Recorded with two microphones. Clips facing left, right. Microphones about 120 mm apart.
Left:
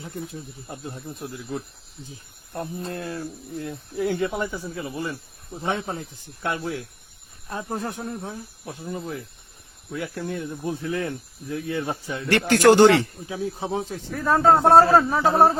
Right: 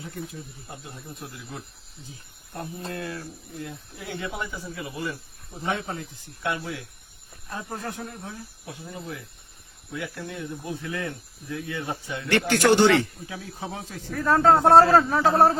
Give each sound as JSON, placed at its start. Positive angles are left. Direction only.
{"t": 0.9, "sound": "speech", "side_deg": 30}
{"t": 7.5, "sound": "speech", "side_deg": 25}
{"t": 8.6, "sound": "speech", "side_deg": 40}
{"t": 14.1, "sound": "speech", "side_deg": 5}